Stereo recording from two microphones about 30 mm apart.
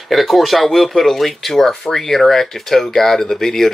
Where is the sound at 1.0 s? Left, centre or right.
Centre.